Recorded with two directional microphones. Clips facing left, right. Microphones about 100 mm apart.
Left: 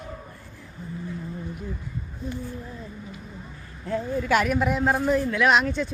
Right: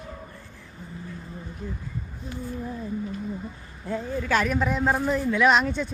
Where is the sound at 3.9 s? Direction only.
Centre (ahead or behind).